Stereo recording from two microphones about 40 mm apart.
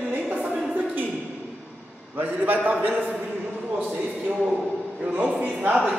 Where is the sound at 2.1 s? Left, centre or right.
Right.